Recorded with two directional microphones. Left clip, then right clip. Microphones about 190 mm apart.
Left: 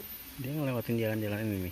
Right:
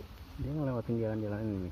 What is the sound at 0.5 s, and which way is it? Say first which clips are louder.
Speech: left 2 dB; 15° left (ahead or behind).